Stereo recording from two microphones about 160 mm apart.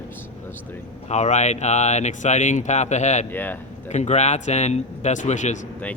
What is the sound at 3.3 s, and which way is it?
Speech, 10° left (ahead or behind).